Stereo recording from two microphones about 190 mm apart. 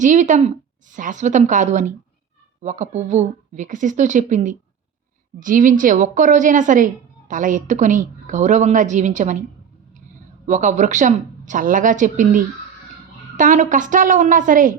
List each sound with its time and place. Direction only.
0.0 s a woman's voice: 40° right (ahead or behind)
10.4 s a woman's voice: 40° right (ahead or behind)